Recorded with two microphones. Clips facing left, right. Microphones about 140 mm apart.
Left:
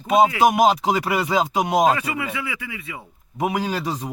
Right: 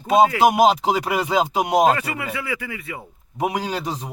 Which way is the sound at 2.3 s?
50° right (ahead or behind).